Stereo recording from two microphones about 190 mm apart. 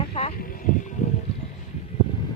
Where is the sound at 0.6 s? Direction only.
45° left (ahead or behind).